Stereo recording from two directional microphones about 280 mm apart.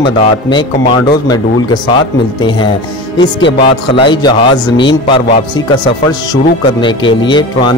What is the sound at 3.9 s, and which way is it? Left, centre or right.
Speech, centre.